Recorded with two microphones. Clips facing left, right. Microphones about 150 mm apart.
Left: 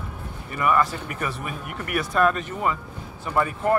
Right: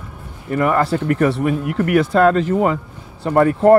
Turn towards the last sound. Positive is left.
turn(degrees=-75)  # may be behind; listen again after turning